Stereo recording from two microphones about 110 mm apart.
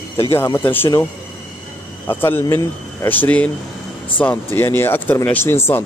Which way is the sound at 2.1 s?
20° left (ahead or behind).